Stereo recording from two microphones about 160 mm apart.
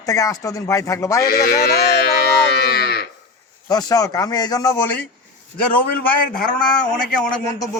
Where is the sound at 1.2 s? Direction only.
70° left (ahead or behind).